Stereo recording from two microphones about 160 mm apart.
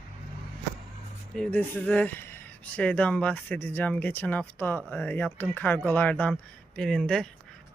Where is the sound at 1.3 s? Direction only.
5° left (ahead or behind).